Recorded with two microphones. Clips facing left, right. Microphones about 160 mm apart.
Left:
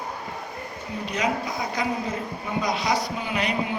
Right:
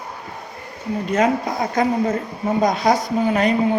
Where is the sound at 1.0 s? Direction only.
50° right (ahead or behind).